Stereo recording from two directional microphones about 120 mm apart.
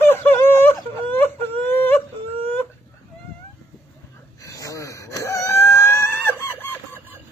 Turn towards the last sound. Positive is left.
turn(degrees=15)  # may be behind; listen again after turning